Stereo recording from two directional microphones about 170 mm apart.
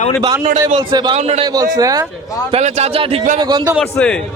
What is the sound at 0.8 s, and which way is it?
Speech, 25° right (ahead or behind).